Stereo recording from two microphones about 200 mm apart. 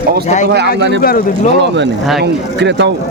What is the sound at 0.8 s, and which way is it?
Speech, 60° right (ahead or behind).